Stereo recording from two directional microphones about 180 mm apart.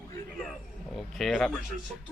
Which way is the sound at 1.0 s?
Centre (ahead or behind).